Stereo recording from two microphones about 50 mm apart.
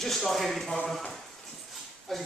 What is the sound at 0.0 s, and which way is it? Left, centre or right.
Speech, centre.